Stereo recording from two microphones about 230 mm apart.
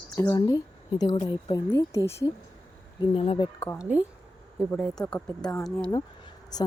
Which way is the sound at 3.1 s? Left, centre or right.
Left.